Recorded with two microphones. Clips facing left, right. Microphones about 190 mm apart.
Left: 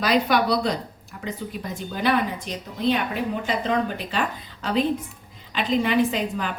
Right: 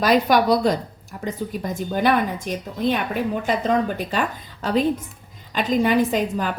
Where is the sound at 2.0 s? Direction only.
50° right (ahead or behind).